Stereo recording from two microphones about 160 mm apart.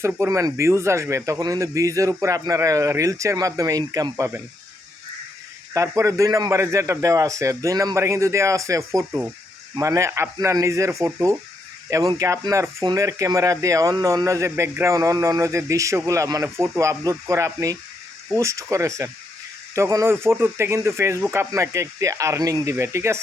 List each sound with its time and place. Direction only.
0.0 s speech: 15° right (ahead or behind)
5.7 s speech: 20° right (ahead or behind)